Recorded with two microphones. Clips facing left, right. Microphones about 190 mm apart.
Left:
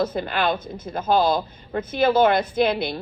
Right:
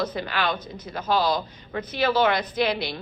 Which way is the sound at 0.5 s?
25° left (ahead or behind).